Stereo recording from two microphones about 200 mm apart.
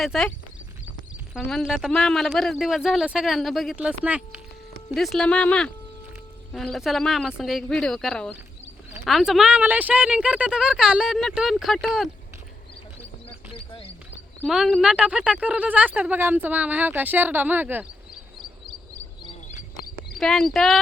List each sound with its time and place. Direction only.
0.0 s speech: centre (ahead or behind)
14.4 s speech: centre (ahead or behind)
19.5 s a sound: 40° left (ahead or behind)
20.1 s speech: centre (ahead or behind)